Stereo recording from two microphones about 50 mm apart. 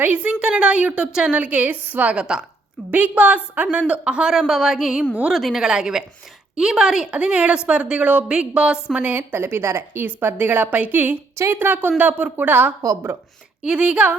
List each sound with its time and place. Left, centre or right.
0.0 s a woman's voice: right
2.0 s a sound: centre
2.9 s a woman's voice: right
4.4 s a sound: centre
5.3 s a woman's voice: centre
5.6 s a sound: centre
7.1 s a woman's voice: right
9.0 s a woman's voice: right
10.1 s a woman's voice: right
13.6 s a woman's voice: right